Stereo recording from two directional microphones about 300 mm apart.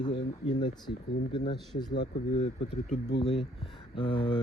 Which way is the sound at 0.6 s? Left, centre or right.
Centre.